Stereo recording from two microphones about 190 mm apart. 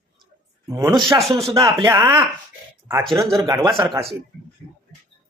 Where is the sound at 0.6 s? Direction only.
15° right (ahead or behind).